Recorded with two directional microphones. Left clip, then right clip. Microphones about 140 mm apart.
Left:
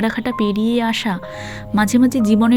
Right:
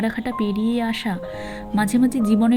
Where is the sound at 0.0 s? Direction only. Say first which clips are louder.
Left 5 dB; 25° left (ahead or behind).